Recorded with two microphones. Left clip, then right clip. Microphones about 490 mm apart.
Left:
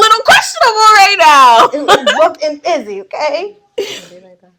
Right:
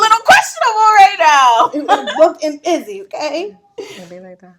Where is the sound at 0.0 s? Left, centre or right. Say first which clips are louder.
Left 2 dB; left.